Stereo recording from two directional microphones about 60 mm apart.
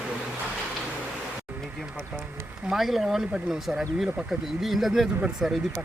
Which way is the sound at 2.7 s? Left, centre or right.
Centre.